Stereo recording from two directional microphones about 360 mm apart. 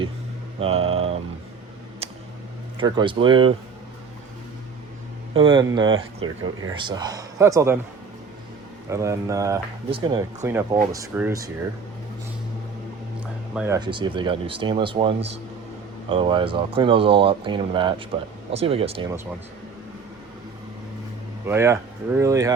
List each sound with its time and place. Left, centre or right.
0.6 s speech: centre
2.7 s speech: centre
5.3 s speech: centre
8.9 s speech: centre
13.1 s speech: centre
21.4 s speech: centre